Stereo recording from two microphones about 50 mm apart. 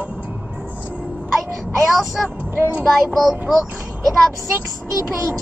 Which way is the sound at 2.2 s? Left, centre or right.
Centre.